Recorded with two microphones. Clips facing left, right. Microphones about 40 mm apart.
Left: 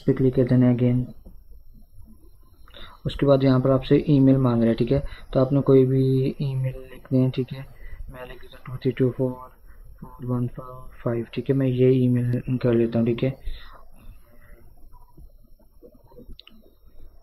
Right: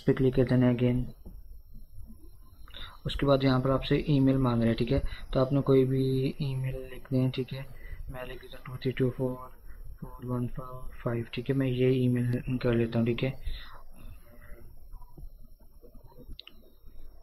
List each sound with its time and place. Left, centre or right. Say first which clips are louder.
0.3 s speech: left 6 dB; centre
2.6 s a sound: left 1 dB; centre
3.0 s speech: left 7 dB; centre
7.8 s a sound: left 2 dB; centre
9.1 s speech: left 6 dB; centre
16.1 s clicking: left 4 dB; centre